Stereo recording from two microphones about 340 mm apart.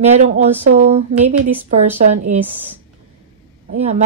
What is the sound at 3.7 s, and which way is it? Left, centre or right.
Speech, centre.